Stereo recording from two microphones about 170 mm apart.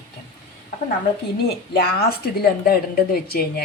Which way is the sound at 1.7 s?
65° left (ahead or behind).